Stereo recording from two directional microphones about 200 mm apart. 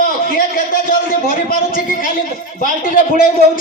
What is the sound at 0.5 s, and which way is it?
A man's voice, 45° left (ahead or behind).